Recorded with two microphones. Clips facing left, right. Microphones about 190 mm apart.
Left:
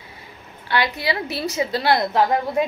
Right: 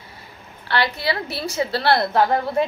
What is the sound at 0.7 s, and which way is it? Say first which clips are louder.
A woman's voice: even; 20° left (ahead or behind).